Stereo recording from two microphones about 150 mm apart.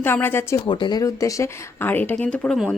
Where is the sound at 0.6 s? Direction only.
30° left (ahead or behind); by 2.5 s 10° left (ahead or behind).